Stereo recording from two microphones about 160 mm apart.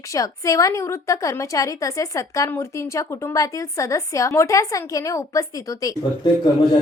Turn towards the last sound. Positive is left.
turn(degrees=25)  # may be behind; listen again after turning